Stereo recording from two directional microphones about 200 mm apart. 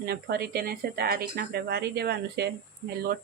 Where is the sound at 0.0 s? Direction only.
50° right (ahead or behind).